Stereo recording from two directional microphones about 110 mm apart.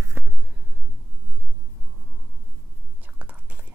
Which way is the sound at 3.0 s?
15° right (ahead or behind).